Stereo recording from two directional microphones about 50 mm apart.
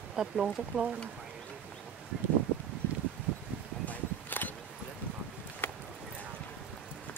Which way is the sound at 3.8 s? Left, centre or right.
Left.